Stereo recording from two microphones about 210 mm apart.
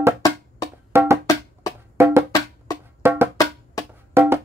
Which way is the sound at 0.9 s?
10° right (ahead or behind).